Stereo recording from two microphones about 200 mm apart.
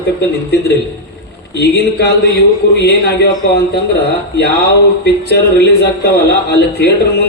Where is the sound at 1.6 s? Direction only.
55° left (ahead or behind).